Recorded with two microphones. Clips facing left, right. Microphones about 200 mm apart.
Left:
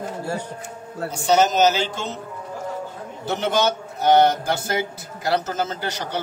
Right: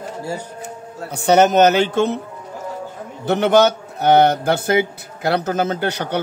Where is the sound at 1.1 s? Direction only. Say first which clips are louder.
Right 5 dB; 60° right (ahead or behind).